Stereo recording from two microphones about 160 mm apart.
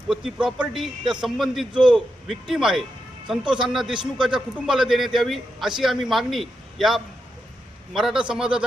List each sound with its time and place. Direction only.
0.1 s a man's voice: 5° right (ahead or behind)